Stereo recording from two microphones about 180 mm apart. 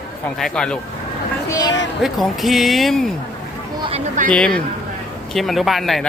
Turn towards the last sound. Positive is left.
turn(degrees=0)  # may be behind; listen again after turning